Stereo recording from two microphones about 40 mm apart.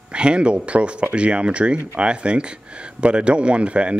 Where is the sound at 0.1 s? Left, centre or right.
Right.